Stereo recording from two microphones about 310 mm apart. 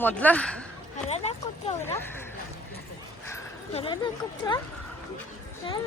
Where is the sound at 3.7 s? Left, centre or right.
Centre.